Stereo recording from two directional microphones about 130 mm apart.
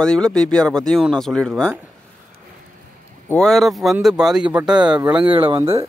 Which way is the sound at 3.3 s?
5° left (ahead or behind).